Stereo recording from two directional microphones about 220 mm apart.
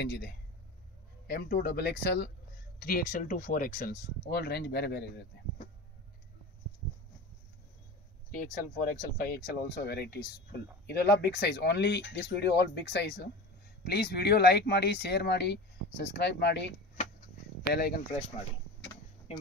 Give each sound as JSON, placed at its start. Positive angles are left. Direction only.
{"t": 0.0, "sound": "speech", "side_deg": 50}
{"t": 8.3, "sound": "speech", "side_deg": 35}
{"t": 17.7, "sound": "speech", "side_deg": 45}